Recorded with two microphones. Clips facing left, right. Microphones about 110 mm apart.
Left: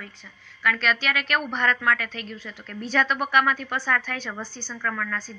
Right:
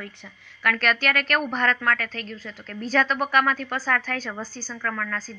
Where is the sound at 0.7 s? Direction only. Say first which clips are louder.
Right 2 dB; 50° right (ahead or behind).